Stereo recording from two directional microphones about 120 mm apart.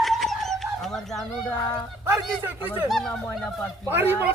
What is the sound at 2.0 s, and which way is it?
Speech, 20° right (ahead or behind).